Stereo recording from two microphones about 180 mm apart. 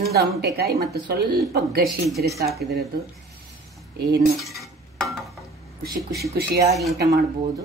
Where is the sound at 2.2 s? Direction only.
20° right (ahead or behind).